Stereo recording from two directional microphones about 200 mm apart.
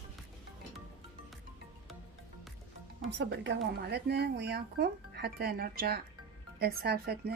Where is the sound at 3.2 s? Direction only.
60° right (ahead or behind).